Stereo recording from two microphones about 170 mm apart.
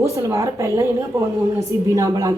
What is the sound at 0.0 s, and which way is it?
A woman's voice, 15° right (ahead or behind).